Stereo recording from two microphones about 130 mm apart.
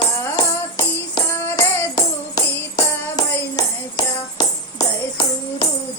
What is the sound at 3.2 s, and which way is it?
Music, 30° left (ahead or behind).